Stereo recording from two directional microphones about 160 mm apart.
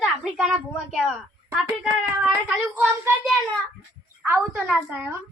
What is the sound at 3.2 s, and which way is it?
Child singing, centre (ahead or behind).